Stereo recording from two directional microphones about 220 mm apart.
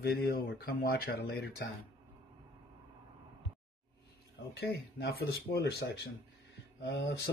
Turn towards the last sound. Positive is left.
turn(degrees=50)  # may be behind; listen again after turning